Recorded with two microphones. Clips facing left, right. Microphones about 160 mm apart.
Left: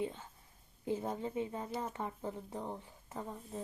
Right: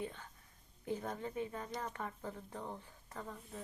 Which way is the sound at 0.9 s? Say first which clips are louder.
Left 4 dB; 25° left (ahead or behind).